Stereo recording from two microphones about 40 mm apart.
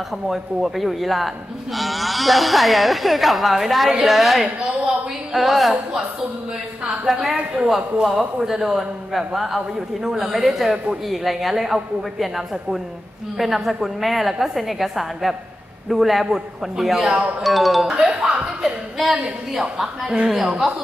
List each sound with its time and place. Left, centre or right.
0.3 s speech: centre
7.1 s a man's voice: centre
16.3 s a man's voice: centre